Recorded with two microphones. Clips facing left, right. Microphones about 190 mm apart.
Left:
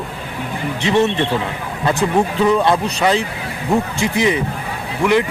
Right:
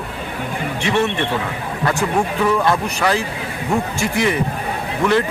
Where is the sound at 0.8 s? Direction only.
20° left (ahead or behind).